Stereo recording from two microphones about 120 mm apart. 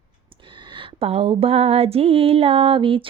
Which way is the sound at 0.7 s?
55° right (ahead or behind).